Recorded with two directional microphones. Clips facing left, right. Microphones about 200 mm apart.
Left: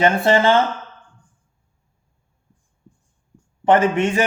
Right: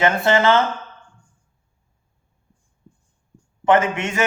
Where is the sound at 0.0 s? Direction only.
30° left (ahead or behind).